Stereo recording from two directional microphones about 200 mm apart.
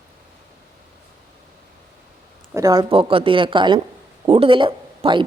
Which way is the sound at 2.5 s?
15° right (ahead or behind).